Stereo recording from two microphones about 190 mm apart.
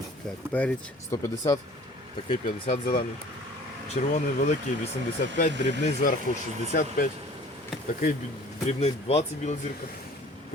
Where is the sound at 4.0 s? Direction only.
40° left (ahead or behind).